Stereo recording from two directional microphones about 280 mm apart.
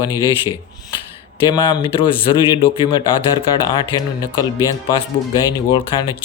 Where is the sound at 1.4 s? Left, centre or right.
Centre.